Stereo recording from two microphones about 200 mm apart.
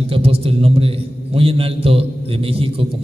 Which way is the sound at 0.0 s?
30° right (ahead or behind).